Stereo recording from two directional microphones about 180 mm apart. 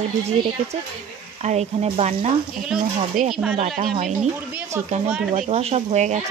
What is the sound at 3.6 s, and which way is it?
Speech, 40° right (ahead or behind).